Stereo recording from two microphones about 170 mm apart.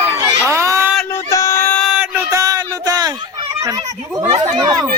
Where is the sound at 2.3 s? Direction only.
20° right (ahead or behind).